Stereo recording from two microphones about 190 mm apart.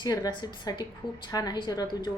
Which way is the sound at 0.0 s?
20° left (ahead or behind).